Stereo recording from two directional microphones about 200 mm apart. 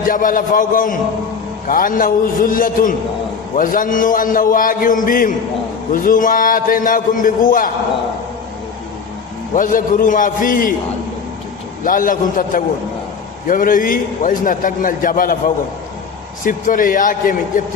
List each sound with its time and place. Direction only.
0.0 s a man's voice: 45° left (ahead or behind)
9.6 s a man's voice: 40° left (ahead or behind)
11.8 s a man's voice: 45° left (ahead or behind)
16.4 s a man's voice: 40° left (ahead or behind)